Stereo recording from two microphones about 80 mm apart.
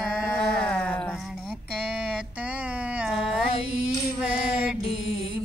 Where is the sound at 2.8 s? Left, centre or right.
Centre.